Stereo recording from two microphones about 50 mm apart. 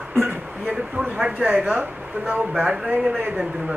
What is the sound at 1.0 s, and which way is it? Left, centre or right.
Speech, right.